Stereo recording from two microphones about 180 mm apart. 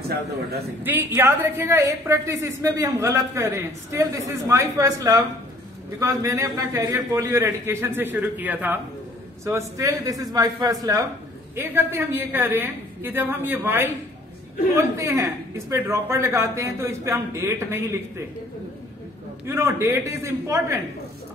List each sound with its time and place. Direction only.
0.8 s a woman's voice: 10° right (ahead or behind)
19.4 s a woman's voice: 15° right (ahead or behind)